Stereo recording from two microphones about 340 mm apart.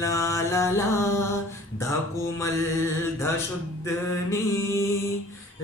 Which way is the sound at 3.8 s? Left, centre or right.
Centre.